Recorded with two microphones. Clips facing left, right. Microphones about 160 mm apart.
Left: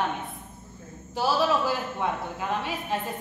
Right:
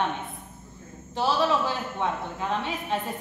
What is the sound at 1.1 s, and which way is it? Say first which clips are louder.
A woman's voice: even; 5° left (ahead or behind).